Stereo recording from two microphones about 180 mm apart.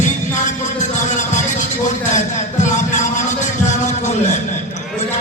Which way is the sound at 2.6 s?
45° left (ahead or behind).